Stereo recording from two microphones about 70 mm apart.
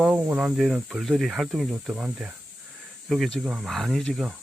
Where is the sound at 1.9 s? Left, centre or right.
Centre.